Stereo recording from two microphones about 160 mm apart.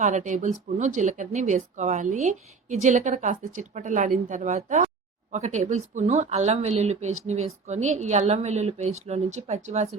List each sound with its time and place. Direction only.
0.0 s speech: 50° right (ahead or behind)